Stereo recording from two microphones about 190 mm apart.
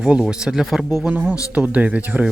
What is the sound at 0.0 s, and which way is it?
Speech, 5° right (ahead or behind).